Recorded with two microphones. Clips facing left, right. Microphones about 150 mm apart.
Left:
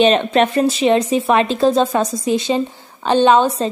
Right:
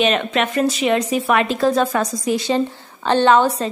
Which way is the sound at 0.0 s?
30° left (ahead or behind).